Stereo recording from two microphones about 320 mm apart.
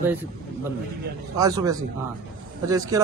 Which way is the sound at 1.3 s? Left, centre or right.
Centre.